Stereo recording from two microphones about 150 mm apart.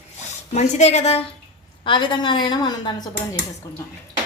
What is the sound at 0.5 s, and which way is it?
Speech, 50° left (ahead or behind).